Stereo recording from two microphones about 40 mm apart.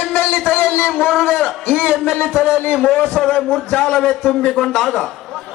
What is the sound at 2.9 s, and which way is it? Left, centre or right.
Speech, left.